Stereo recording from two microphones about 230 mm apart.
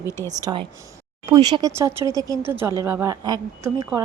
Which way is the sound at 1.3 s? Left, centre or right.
Centre.